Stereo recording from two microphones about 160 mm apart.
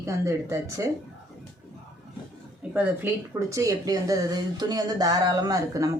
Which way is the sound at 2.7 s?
15° right (ahead or behind).